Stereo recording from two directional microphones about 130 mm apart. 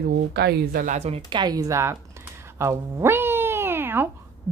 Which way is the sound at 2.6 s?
20° right (ahead or behind).